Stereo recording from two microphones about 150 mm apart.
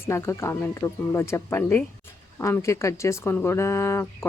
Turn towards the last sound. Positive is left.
turn(degrees=15)  # may be behind; listen again after turning